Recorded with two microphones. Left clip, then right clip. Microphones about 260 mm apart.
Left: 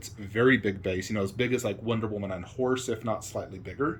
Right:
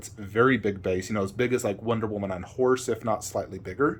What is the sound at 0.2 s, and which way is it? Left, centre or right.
Speech, centre.